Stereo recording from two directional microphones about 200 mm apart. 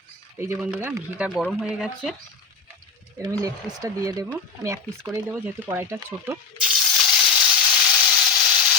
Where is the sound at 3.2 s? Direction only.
15° right (ahead or behind).